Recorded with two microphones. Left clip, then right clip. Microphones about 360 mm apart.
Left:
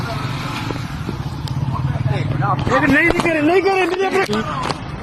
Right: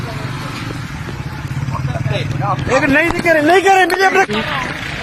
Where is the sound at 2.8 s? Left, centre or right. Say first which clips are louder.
Right 2 dB; right.